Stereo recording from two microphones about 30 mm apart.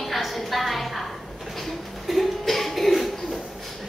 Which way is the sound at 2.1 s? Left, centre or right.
Centre.